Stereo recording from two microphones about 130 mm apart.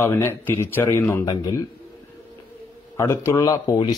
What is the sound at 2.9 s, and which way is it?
Speech, 20° left (ahead or behind).